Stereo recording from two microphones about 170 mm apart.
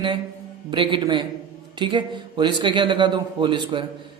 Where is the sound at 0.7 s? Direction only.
30° right (ahead or behind).